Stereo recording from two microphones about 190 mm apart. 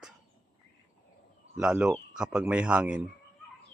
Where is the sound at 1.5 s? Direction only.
5° right (ahead or behind).